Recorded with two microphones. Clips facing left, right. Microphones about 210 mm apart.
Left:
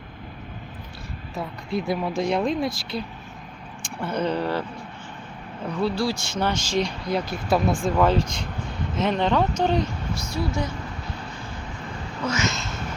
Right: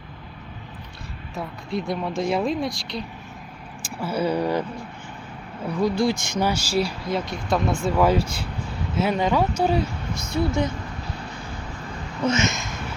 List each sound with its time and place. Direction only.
1.4 s speech: centre (ahead or behind); by 4.6 s 15° right (ahead or behind)
5.6 s speech: 10° right (ahead or behind)
10.2 s speech: 20° right (ahead or behind)
12.2 s a sound: 25° right (ahead or behind)